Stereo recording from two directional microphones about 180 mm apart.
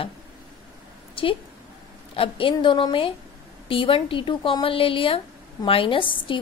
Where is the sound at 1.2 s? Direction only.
30° left (ahead or behind).